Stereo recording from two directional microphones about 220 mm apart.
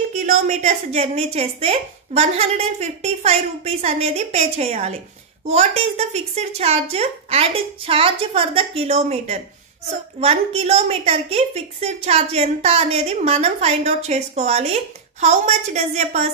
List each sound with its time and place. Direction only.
0.1 s a woman's voice: 30° right (ahead or behind)